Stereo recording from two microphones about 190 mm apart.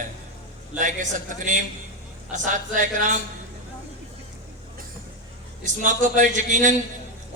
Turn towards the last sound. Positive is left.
turn(degrees=-40)  # may be behind; listen again after turning